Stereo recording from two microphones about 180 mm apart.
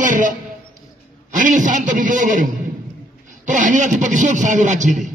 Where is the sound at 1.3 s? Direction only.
45° right (ahead or behind).